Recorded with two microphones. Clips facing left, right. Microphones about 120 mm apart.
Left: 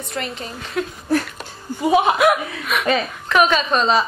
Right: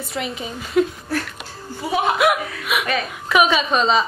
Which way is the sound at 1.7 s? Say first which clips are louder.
Left 6 dB; 15° left (ahead or behind).